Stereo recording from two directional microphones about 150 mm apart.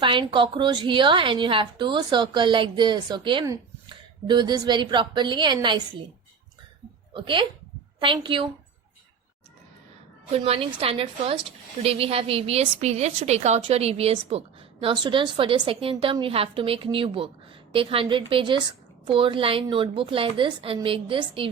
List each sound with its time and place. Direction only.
0.0 s a woman's voice: 35° right (ahead or behind)
7.1 s a woman's voice: 35° right (ahead or behind)
10.3 s a woman's voice: 40° right (ahead or behind)